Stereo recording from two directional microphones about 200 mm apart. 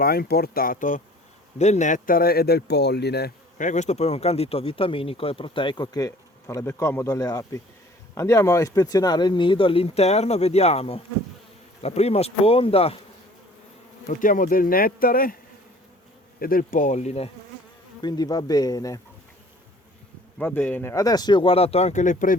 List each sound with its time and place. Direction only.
0.0 s speech: 50° left (ahead or behind)
3.6 s speech: 35° left (ahead or behind)
14.1 s speech: 40° left (ahead or behind)
16.4 s bee: 45° left (ahead or behind)
18.0 s speech: 20° left (ahead or behind)
20.4 s speech: 10° left (ahead or behind); by 22.4 s 40° left (ahead or behind)